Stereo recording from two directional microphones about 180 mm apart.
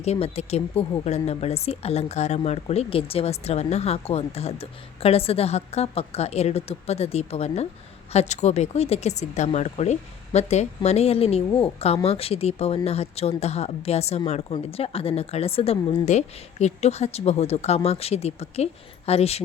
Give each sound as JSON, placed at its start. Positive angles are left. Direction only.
{"t": 0.0, "sound": "a woman's voice", "side_deg": 35}